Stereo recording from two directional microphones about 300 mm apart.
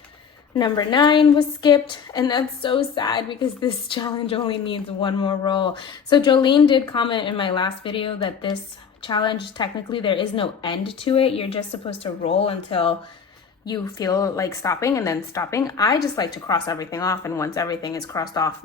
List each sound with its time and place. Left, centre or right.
0.5 s a woman's voice: centre